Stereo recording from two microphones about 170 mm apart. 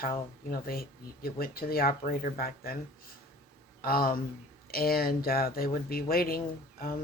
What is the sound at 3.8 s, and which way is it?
Speech, 60° left (ahead or behind).